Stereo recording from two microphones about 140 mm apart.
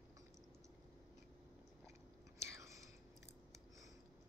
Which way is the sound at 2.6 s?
20° right (ahead or behind).